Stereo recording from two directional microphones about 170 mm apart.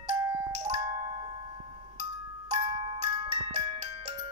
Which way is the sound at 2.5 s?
30° right (ahead or behind).